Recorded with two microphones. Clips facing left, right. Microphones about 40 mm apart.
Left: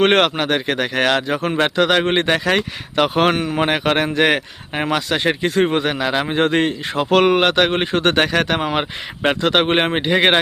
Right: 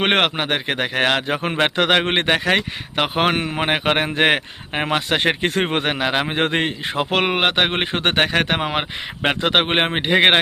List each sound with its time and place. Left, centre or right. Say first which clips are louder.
0.0 s speech: left 3 dB; centre
1.3 s speech: left 1 dB; right
1.7 s speech: left 2 dB; right
3.0 s speech: left 3 dB; centre
3.3 s speech: left 2 dB; right